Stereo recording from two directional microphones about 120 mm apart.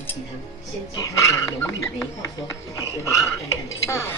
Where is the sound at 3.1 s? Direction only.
25° left (ahead or behind).